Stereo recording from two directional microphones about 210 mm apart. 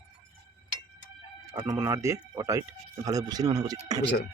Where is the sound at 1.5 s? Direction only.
15° right (ahead or behind).